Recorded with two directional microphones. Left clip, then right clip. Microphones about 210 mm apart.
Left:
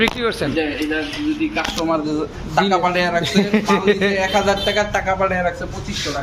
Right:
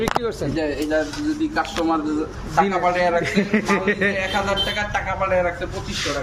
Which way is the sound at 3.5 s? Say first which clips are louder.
Left 4 dB; 15° left (ahead or behind).